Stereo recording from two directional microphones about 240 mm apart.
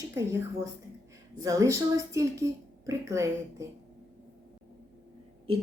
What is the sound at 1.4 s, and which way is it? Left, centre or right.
A woman's voice, centre.